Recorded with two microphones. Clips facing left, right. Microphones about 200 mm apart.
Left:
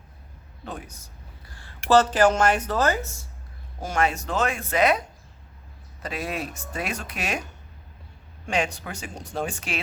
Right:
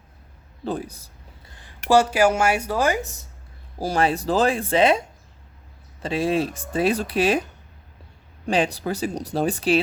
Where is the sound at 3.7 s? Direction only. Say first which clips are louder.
Right 4 dB; 35° right (ahead or behind).